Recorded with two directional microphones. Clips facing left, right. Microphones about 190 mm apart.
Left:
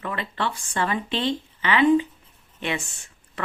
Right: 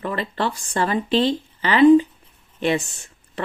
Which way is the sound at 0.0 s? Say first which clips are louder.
Right 4 dB; 35° right (ahead or behind).